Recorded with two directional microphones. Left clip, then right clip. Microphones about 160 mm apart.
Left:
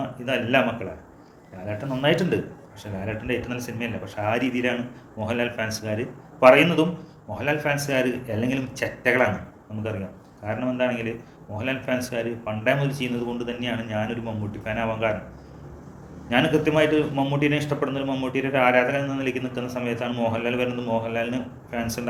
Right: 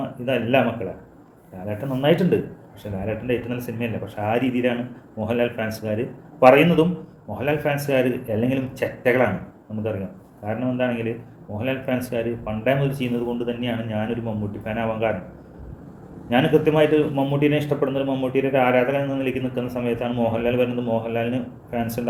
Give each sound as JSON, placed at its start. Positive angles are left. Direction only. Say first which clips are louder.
{"t": 0.3, "sound": "a man's voice", "louder": "right 2 dB", "side_deg": -20}
{"t": 10.4, "sound": "a man's voice", "louder": "right 1 dB", "side_deg": -20}
{"t": 16.3, "sound": "a man's voice", "louder": "right 3 dB", "side_deg": -20}